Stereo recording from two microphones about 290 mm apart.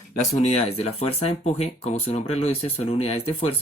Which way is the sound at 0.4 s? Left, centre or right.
Left.